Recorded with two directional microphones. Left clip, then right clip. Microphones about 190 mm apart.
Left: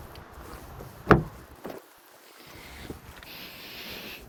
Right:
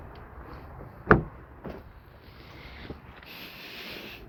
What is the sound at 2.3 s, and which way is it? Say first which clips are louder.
Boat: left 1 dB; 35° left (ahead or behind).